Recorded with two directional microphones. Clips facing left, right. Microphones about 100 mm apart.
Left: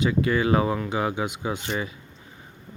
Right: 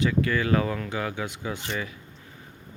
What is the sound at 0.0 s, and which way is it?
Speech, 20° left (ahead or behind).